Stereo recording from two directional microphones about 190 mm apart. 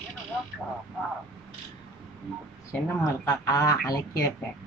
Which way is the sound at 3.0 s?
20° left (ahead or behind).